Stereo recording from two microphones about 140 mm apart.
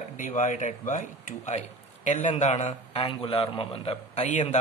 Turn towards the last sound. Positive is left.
turn(degrees=55)  # may be behind; listen again after turning